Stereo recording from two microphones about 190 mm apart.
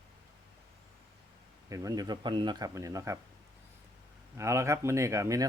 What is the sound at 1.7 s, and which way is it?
Speech, 20° right (ahead or behind).